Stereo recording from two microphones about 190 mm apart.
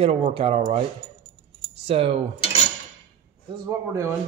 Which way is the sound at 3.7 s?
15° right (ahead or behind).